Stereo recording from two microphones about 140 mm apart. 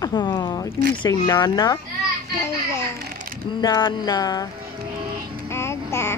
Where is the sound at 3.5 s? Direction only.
30° left (ahead or behind).